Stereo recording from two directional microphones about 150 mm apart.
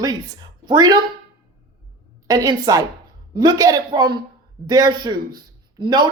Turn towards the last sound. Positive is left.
turn(degrees=-30)  # may be behind; listen again after turning